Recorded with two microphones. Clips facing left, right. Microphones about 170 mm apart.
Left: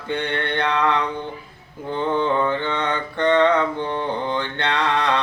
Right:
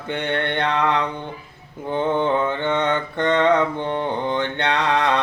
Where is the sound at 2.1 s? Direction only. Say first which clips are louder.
Even; 20° right (ahead or behind).